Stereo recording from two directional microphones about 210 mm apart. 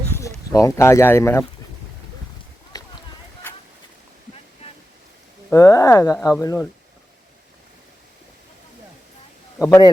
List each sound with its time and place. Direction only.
0.5 s speech: 15° left (ahead or behind)
2.7 s run: 15° left (ahead or behind)
5.5 s speech: 15° left (ahead or behind)
9.6 s speech: 15° left (ahead or behind)